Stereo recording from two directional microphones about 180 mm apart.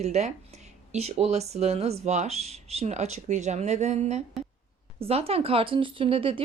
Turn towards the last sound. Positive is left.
turn(degrees=-30)  # may be behind; listen again after turning